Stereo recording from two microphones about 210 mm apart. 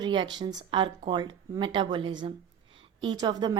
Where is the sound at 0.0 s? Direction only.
20° right (ahead or behind).